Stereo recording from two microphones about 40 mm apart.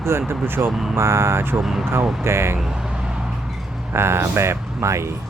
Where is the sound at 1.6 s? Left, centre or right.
Centre.